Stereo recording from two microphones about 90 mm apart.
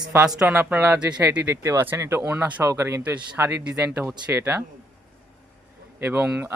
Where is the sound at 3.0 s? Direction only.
20° right (ahead or behind).